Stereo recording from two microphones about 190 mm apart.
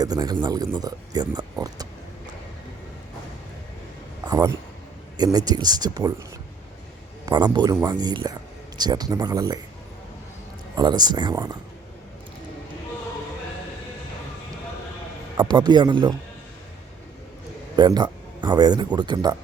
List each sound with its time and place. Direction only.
0.0 s speech: 20° right (ahead or behind)
4.3 s speech: 20° right (ahead or behind)
7.3 s speech: 20° right (ahead or behind)
10.8 s speech: 20° right (ahead or behind)
15.4 s speech: 25° right (ahead or behind)
17.7 s speech: 20° right (ahead or behind)